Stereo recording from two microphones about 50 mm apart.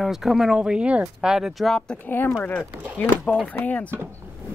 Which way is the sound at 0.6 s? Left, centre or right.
Right.